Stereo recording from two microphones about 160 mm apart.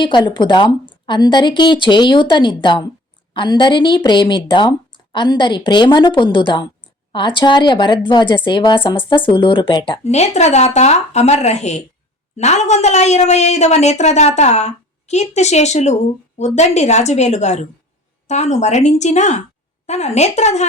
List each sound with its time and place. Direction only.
0.0 s a woman's voice: 30° left (ahead or behind); by 20.7 s 45° left (ahead or behind)